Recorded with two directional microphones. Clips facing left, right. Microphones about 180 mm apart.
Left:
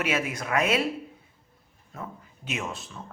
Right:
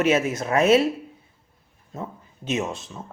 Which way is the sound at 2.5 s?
25° right (ahead or behind).